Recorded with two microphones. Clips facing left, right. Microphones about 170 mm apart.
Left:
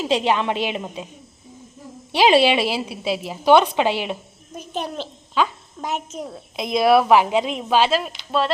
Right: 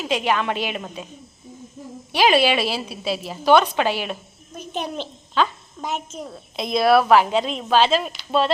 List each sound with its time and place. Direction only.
0.0 s a woman's voice: 30° left (ahead or behind)
2.1 s a woman's voice: 25° left (ahead or behind); by 8.5 s centre (ahead or behind)